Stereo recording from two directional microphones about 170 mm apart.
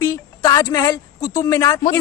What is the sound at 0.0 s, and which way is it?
A woman's voice, 15° left (ahead or behind).